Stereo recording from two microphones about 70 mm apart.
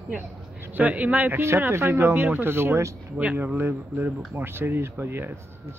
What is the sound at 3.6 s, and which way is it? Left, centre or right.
Speech, right.